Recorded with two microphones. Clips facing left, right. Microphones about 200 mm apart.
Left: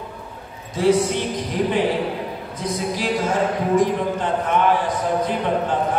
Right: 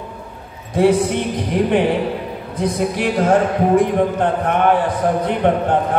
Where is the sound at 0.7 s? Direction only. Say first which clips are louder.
Right 3 dB; 60° right (ahead or behind).